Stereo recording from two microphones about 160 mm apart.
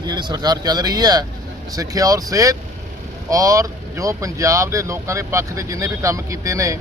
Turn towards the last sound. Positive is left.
turn(degrees=-20)  # may be behind; listen again after turning